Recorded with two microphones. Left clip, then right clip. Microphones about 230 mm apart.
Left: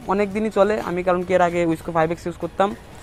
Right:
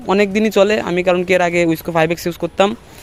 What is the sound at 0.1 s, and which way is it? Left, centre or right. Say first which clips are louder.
Speech: right 7 dB; right.